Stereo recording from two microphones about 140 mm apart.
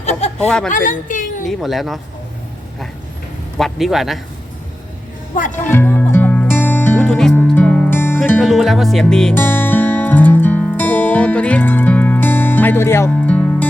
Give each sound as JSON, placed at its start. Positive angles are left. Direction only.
{"t": 0.0, "sound": "a sound", "side_deg": 55}
{"t": 0.3, "sound": "speech", "side_deg": 5}
{"t": 0.7, "sound": "a woman's voice", "side_deg": 70}
{"t": 1.5, "sound": "speech", "side_deg": 0}
{"t": 3.6, "sound": "speech", "side_deg": 0}
{"t": 5.6, "sound": "music", "side_deg": 15}
{"t": 7.0, "sound": "music", "side_deg": 5}
{"t": 8.4, "sound": "speech", "side_deg": 0}
{"t": 9.3, "sound": "music", "side_deg": 15}